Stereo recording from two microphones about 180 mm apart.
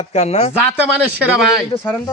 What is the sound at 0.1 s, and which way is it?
Speech, 40° left (ahead or behind).